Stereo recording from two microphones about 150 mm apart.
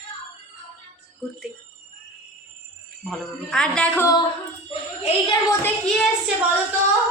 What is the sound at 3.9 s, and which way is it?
Speech, 20° left (ahead or behind).